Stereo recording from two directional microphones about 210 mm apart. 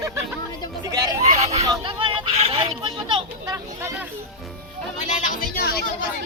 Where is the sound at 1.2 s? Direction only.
35° right (ahead or behind); by 4.0 s 10° right (ahead or behind).